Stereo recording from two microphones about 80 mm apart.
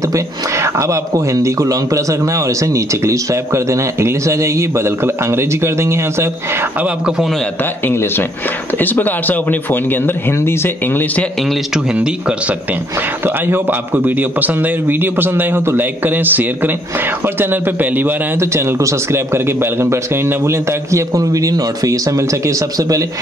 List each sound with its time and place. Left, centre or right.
0.1 s speech: right
7.8 s speech: left
11.7 s speech: centre
13.2 s a man's voice: right